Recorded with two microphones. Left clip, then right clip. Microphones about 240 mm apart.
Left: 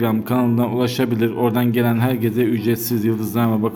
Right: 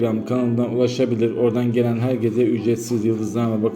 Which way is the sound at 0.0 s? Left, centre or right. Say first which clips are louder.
Left 1 dB; left.